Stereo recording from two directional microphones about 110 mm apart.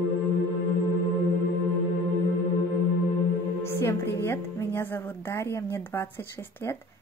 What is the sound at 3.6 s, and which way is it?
Speech, 25° left (ahead or behind).